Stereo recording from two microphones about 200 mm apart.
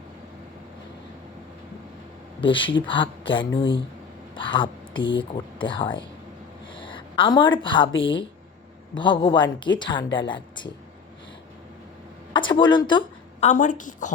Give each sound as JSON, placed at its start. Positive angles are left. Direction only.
{"t": 2.4, "sound": "a woman's voice", "side_deg": 25}
{"t": 9.0, "sound": "speech", "side_deg": 20}
{"t": 12.3, "sound": "a sound", "side_deg": 25}
{"t": 13.5, "sound": "a woman's voice", "side_deg": 40}